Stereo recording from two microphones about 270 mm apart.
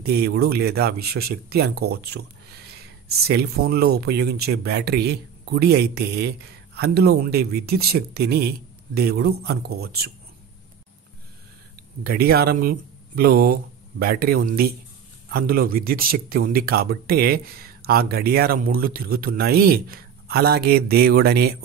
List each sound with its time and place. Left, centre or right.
0.0 s speech: right
12.0 s speech: right